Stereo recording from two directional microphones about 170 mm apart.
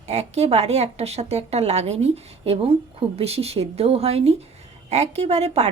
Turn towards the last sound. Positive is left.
turn(degrees=-40)  # may be behind; listen again after turning